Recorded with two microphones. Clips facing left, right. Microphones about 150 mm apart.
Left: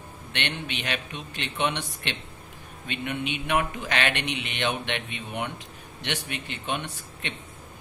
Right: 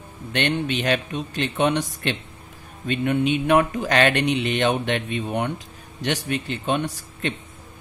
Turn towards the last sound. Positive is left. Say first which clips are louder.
# right 9 dB
turn(degrees=-40)  # may be behind; listen again after turning